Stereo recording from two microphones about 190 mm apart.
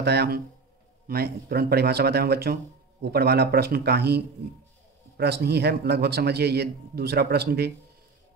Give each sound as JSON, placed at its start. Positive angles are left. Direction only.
{"t": 0.0, "sound": "speech", "side_deg": -60}